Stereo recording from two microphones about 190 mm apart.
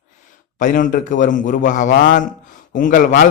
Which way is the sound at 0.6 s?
45° left (ahead or behind).